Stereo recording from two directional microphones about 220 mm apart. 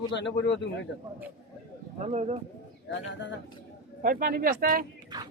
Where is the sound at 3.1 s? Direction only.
55° left (ahead or behind).